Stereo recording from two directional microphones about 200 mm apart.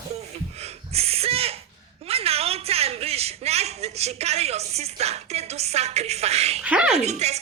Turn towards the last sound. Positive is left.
turn(degrees=-35)  # may be behind; listen again after turning